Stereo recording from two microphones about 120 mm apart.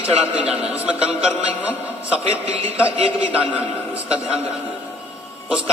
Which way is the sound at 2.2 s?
55° right (ahead or behind).